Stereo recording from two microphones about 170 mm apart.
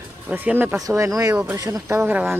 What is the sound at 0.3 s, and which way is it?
Speech, 10° right (ahead or behind).